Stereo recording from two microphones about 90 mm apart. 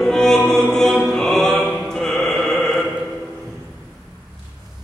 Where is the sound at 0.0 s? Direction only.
5° left (ahead or behind).